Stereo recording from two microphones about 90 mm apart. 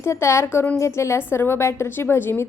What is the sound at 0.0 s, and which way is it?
A woman's voice, 30° left (ahead or behind).